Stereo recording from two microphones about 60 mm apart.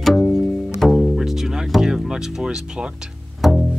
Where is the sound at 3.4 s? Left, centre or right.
Centre.